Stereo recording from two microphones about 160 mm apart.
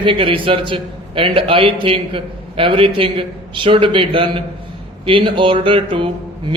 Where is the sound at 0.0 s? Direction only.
30° right (ahead or behind).